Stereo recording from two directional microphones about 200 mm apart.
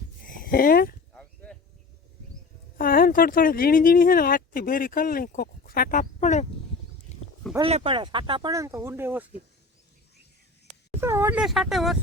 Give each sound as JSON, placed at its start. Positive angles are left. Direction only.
{"t": 0.3, "sound": "speech", "side_deg": 45}
{"t": 1.1, "sound": "chop", "side_deg": 5}
{"t": 2.7, "sound": "speech", "side_deg": 45}
{"t": 7.6, "sound": "speech", "side_deg": -25}
{"t": 11.0, "sound": "speech", "side_deg": -10}